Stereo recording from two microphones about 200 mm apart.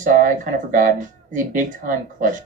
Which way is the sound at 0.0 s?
40° right (ahead or behind).